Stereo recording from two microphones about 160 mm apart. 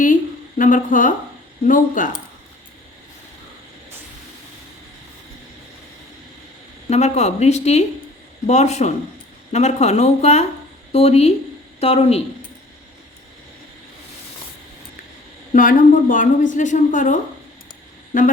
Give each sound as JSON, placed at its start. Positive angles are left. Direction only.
{"t": 0.6, "sound": "speech", "side_deg": 55}
{"t": 6.9, "sound": "a woman's voice", "side_deg": 45}
{"t": 15.5, "sound": "a woman's voice", "side_deg": 55}